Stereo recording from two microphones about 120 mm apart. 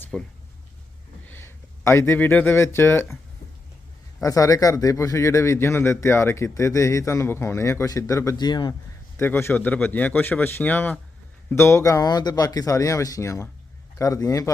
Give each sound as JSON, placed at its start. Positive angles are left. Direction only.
{"t": 0.1, "sound": "speech", "side_deg": 0}
{"t": 1.3, "sound": "speech", "side_deg": 20}
{"t": 4.2, "sound": "a man's voice", "side_deg": 30}
{"t": 8.4, "sound": "speech", "side_deg": 35}
{"t": 9.1, "sound": "a man's voice", "side_deg": 20}